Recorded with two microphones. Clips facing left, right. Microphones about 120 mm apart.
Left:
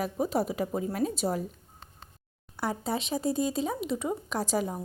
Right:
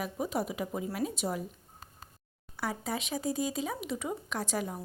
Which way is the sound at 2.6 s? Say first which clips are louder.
Left 4 dB; 30° left (ahead or behind).